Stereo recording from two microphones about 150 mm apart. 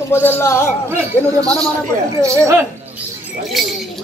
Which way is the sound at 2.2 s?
20° right (ahead or behind).